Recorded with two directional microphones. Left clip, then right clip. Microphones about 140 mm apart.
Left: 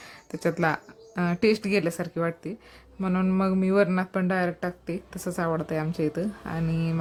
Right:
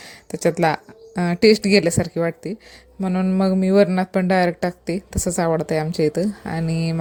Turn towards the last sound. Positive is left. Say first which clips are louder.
# right 6 dB
turn(degrees=-30)  # may be behind; listen again after turning